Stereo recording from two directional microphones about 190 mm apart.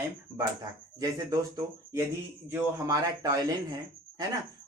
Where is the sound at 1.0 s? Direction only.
20° right (ahead or behind).